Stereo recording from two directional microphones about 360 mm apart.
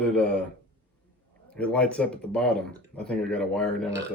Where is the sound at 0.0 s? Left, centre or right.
Centre.